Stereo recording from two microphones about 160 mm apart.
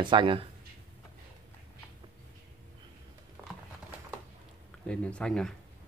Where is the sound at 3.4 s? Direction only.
15° right (ahead or behind).